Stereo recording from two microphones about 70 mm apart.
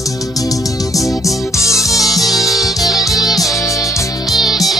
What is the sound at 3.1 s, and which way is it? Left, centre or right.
Music, left.